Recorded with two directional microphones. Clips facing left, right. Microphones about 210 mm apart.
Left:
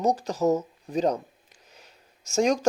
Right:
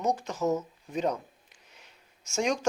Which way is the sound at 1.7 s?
40° left (ahead or behind).